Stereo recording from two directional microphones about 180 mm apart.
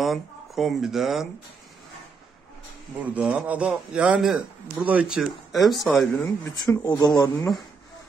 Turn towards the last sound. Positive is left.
turn(degrees=20)  # may be behind; listen again after turning